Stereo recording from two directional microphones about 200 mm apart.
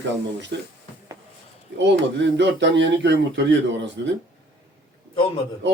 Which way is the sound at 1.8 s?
60° right (ahead or behind).